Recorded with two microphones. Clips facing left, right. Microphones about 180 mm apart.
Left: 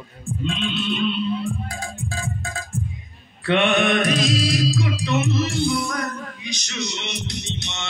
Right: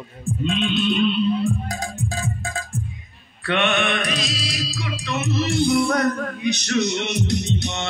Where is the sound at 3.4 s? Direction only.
25° left (ahead or behind); by 4.8 s 50° left (ahead or behind).